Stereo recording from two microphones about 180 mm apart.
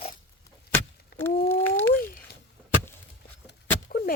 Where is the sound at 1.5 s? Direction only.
10° left (ahead or behind).